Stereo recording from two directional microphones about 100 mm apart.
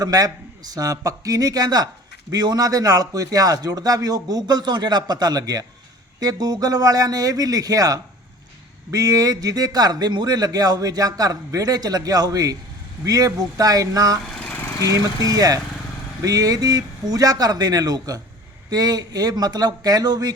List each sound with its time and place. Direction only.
0.0 s a man's voice: 40° right (ahead or behind)
14.3 s lawn mower: 15° left (ahead or behind)
14.8 s a man's voice: 40° right (ahead or behind)